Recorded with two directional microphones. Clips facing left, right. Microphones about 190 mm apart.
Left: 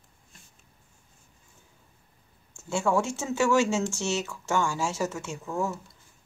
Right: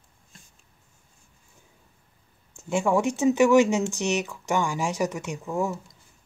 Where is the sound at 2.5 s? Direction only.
15° right (ahead or behind).